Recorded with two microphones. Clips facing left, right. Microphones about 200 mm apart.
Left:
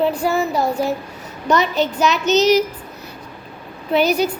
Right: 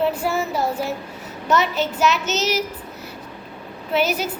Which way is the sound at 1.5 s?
5° right (ahead or behind).